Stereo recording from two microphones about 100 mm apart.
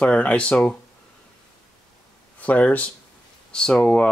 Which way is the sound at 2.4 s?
15° left (ahead or behind).